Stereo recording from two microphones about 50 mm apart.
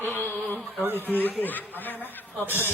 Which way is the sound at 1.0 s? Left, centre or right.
Left.